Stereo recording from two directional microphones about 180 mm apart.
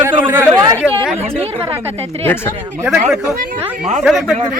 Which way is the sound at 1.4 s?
35° right (ahead or behind).